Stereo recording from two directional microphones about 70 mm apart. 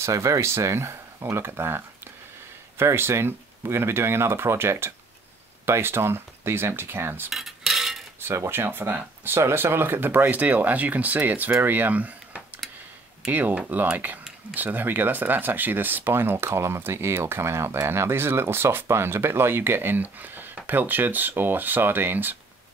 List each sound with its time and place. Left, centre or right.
0.0 s speech: right
2.8 s speech: right
7.2 s cutlery: centre
8.5 s speech: right